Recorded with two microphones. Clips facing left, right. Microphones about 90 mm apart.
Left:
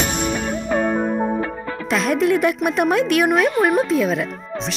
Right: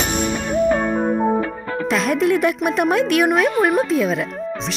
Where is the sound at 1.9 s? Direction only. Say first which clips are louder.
Even; centre (ahead or behind).